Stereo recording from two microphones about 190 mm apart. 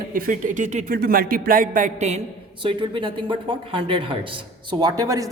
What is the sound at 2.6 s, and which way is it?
Speech, 25° right (ahead or behind).